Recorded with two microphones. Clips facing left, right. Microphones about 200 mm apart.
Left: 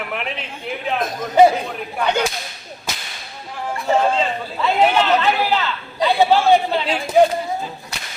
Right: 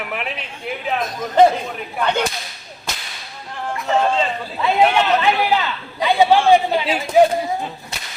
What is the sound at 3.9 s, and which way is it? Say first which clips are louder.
Speech: left 1 dB; centre (ahead or behind).